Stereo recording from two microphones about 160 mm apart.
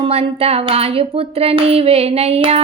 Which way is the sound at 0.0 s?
40° right (ahead or behind).